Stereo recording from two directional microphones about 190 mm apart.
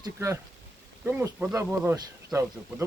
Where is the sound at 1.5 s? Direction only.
15° right (ahead or behind).